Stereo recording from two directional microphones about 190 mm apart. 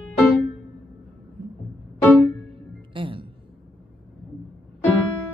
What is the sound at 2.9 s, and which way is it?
Music, 25° right (ahead or behind).